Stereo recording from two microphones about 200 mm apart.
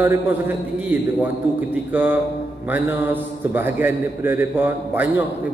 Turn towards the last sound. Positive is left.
turn(degrees=-10)  # may be behind; listen again after turning